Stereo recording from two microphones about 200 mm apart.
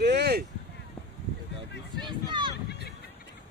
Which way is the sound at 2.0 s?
25° right (ahead or behind).